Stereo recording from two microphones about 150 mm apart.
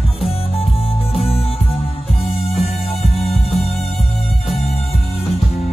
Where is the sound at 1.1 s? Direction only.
40° left (ahead or behind).